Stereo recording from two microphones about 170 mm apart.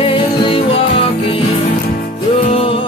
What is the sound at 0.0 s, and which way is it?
Music, 30° left (ahead or behind).